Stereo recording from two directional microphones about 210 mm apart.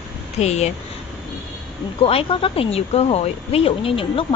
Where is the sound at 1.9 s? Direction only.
25° left (ahead or behind).